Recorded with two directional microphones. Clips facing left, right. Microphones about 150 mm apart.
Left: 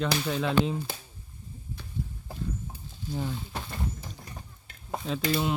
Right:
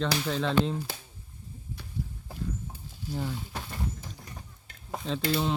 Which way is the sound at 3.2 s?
20° left (ahead or behind).